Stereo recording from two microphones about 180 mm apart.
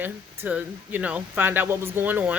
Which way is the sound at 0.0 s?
10° right (ahead or behind).